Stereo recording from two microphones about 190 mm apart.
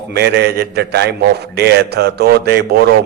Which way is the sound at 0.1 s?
60° right (ahead or behind).